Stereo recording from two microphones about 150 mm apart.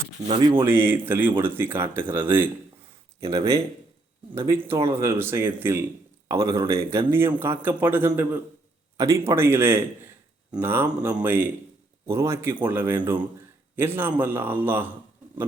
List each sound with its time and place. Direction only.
0.3 s speech: 35° right (ahead or behind)
0.6 s speech: 15° right (ahead or behind)